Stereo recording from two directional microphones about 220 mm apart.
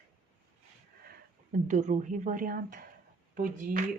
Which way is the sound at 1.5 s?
35° right (ahead or behind).